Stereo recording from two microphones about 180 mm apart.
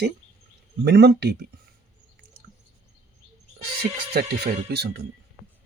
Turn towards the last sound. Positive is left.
turn(degrees=-65)  # may be behind; listen again after turning